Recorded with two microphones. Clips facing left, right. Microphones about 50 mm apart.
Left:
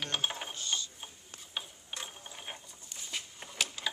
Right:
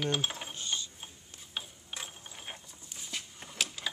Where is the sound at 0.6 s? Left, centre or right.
Centre.